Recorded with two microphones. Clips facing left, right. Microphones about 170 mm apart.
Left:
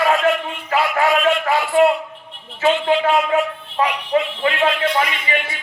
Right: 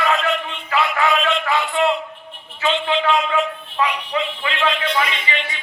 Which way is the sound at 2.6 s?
40° left (ahead or behind).